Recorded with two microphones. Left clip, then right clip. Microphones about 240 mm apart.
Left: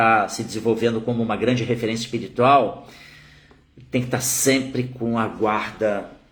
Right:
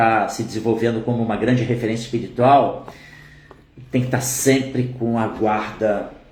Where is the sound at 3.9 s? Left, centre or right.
Centre.